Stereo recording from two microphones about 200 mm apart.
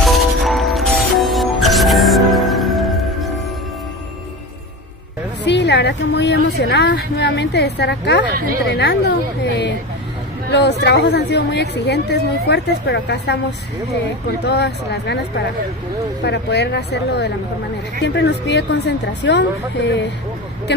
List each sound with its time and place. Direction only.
0.0 s music: centre (ahead or behind)
5.4 s a woman's voice: 60° left (ahead or behind)
14.4 s speech: 55° left (ahead or behind)
16.3 s speech: 60° left (ahead or behind)